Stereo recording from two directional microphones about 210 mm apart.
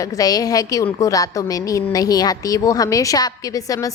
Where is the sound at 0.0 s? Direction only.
15° left (ahead or behind).